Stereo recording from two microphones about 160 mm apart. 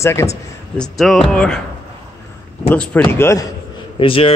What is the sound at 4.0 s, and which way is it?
Speech, 35° left (ahead or behind).